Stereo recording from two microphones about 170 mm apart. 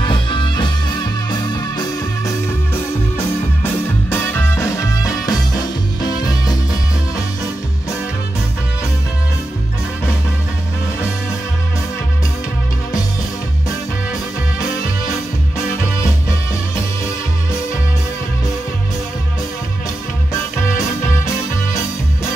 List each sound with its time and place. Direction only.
0.0 s music: 30° left (ahead or behind)
15.8 s music: 15° left (ahead or behind)